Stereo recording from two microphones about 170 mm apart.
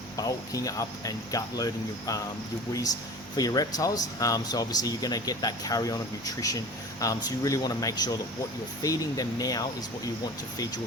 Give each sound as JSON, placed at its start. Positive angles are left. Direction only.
{"t": 0.2, "sound": "speech", "side_deg": 20}
{"t": 3.3, "sound": "speech", "side_deg": 20}